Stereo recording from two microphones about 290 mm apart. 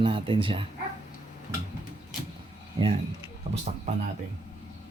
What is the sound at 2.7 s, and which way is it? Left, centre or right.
Speech, centre.